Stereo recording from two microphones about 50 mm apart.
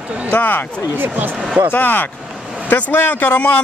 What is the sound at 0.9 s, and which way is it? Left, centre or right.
Speech, right.